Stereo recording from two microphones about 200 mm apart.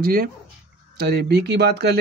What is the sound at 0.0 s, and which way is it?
Speech, 45° right (ahead or behind).